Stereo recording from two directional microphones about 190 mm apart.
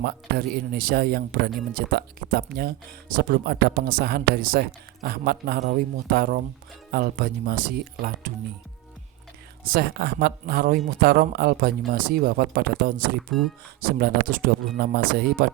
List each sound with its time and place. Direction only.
0.0 s speech: 55° right (ahead or behind)
9.6 s speech: 55° right (ahead or behind)